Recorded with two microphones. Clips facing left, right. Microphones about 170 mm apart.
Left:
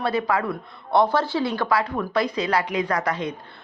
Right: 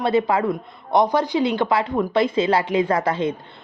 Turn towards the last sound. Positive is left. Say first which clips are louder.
# right 4 dB
turn(degrees=-25)  # may be behind; listen again after turning